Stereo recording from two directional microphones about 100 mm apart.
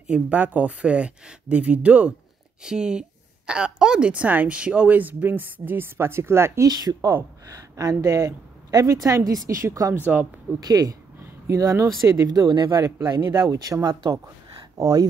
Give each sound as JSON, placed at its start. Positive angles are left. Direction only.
{"t": 0.0, "sound": "a woman's voice", "side_deg": -15}
{"t": 6.7, "sound": "a woman's voice", "side_deg": -40}
{"t": 9.9, "sound": "speech", "side_deg": -20}
{"t": 10.6, "sound": "a woman's voice", "side_deg": -40}
{"t": 12.6, "sound": "a woman's voice", "side_deg": -30}
{"t": 13.8, "sound": "a woman's voice", "side_deg": -45}